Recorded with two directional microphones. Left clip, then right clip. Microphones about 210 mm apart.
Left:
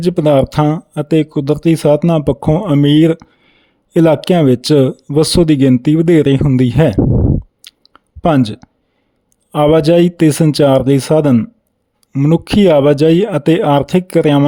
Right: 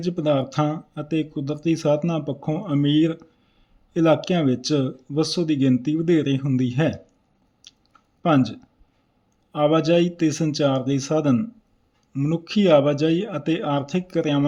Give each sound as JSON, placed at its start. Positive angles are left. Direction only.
{"t": 0.0, "sound": "speech", "side_deg": 45}
{"t": 7.6, "sound": "chewing", "side_deg": 45}
{"t": 9.5, "sound": "speech", "side_deg": 45}